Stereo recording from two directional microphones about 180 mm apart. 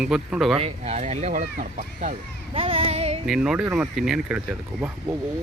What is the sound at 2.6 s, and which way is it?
Child singing, 30° right (ahead or behind).